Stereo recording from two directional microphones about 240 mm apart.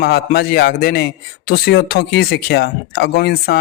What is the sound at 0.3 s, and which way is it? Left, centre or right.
A man's voice, left.